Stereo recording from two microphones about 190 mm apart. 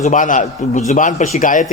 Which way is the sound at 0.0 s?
40° left (ahead or behind).